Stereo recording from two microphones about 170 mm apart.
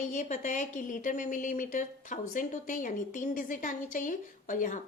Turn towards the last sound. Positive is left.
turn(degrees=50)  # may be behind; listen again after turning